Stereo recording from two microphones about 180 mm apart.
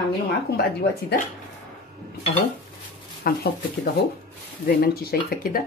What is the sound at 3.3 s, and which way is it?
Speech, 55° left (ahead or behind).